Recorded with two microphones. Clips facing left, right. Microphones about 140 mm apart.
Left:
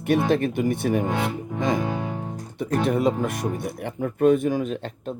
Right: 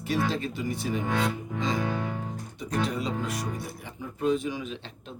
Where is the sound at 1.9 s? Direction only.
20° left (ahead or behind).